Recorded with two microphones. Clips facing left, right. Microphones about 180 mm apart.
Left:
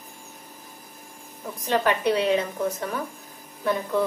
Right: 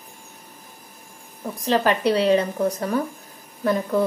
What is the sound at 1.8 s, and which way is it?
A woman's voice, 35° right (ahead or behind).